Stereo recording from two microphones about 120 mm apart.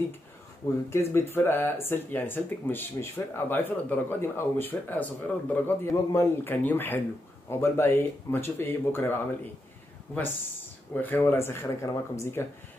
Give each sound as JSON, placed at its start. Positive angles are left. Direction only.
{"t": 0.8, "sound": "speech", "side_deg": 20}
{"t": 11.0, "sound": "speech", "side_deg": 15}